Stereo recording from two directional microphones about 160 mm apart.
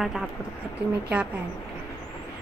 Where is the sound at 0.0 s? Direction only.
Centre (ahead or behind).